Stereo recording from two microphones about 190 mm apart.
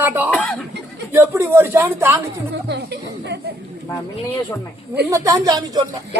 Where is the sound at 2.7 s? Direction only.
60° right (ahead or behind).